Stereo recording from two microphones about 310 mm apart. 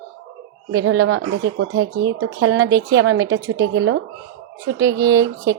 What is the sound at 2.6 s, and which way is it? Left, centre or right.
Speech, centre.